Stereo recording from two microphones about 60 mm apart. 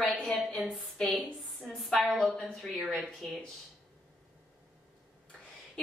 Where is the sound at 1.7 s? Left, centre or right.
Centre.